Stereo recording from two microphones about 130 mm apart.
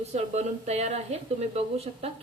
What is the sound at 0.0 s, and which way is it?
Speech, 60° right (ahead or behind).